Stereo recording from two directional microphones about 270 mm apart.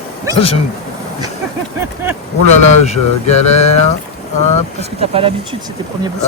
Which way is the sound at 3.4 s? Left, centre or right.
Left.